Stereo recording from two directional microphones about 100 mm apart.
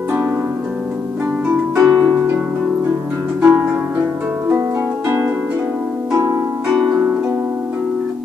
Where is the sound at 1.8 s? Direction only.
35° right (ahead or behind).